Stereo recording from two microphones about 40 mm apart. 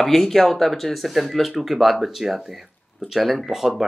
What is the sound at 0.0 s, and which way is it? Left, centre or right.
Speech, centre.